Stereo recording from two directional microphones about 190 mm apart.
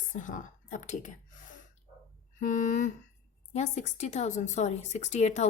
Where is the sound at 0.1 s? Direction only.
45° left (ahead or behind).